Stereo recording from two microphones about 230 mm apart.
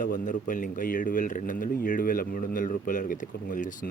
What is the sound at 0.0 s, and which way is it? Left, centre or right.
Speech, left.